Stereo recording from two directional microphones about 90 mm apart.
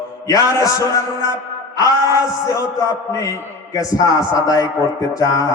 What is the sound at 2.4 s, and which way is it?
Speech, 40° left (ahead or behind).